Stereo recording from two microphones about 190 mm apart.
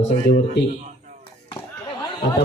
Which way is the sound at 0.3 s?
60° left (ahead or behind).